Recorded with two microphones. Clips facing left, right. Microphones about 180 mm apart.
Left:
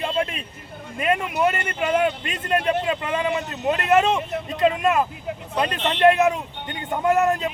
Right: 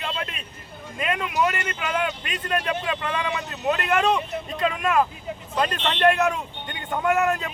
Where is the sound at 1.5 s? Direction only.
30° left (ahead or behind).